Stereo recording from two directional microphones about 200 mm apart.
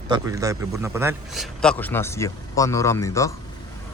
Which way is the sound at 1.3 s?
Centre (ahead or behind).